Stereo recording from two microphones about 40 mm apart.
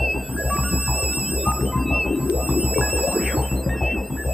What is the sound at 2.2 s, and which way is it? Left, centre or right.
Music, right.